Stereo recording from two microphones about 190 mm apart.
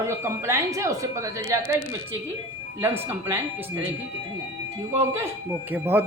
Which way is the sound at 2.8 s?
15° right (ahead or behind).